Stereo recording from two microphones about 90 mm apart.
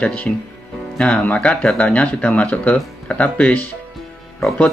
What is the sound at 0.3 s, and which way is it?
Speech, 10° left (ahead or behind).